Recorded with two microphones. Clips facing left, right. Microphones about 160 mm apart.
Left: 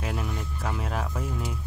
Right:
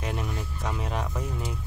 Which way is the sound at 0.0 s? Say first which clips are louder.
Even; centre (ahead or behind).